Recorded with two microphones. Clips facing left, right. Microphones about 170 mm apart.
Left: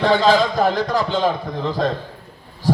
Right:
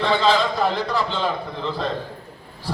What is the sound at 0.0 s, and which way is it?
Speech, 40° left (ahead or behind).